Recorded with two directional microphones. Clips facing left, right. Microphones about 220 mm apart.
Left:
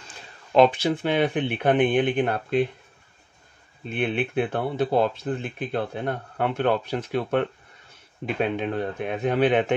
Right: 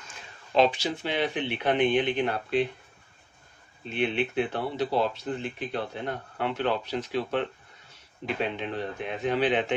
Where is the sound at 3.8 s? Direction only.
55° left (ahead or behind).